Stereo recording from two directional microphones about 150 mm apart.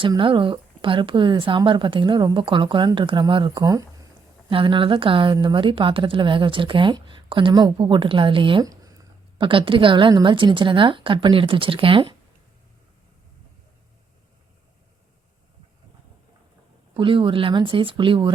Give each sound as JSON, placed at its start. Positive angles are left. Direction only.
{"t": 0.0, "sound": "speech", "side_deg": -35}
{"t": 4.4, "sound": "speech", "side_deg": -35}
{"t": 9.4, "sound": "speech", "side_deg": -35}
{"t": 16.9, "sound": "speech", "side_deg": -35}